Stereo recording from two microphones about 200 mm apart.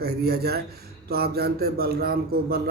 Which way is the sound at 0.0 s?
50° right (ahead or behind).